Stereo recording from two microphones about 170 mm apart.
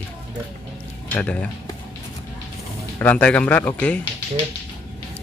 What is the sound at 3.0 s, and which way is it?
Speech, 10° left (ahead or behind).